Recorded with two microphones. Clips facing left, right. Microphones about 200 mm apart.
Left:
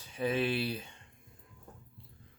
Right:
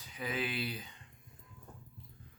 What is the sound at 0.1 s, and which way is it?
Speech, 30° left (ahead or behind).